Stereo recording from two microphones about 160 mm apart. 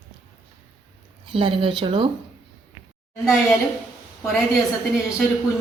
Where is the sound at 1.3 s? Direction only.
35° right (ahead or behind).